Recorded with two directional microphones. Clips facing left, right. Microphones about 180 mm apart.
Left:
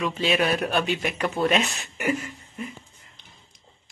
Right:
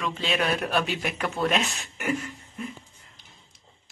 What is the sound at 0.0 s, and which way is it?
Speech, 5° left (ahead or behind).